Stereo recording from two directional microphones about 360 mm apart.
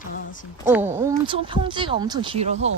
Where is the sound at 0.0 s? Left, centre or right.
Left.